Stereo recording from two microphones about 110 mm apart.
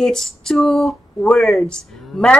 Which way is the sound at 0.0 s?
5° left (ahead or behind).